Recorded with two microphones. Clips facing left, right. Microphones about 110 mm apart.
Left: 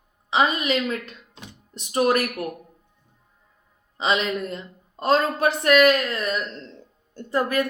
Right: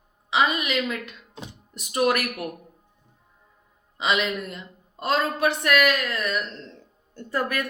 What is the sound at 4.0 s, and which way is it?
A woman's voice, 35° left (ahead or behind).